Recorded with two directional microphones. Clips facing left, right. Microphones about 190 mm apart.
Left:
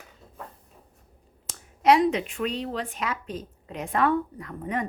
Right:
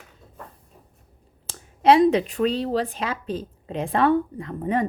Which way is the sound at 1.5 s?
30° right (ahead or behind).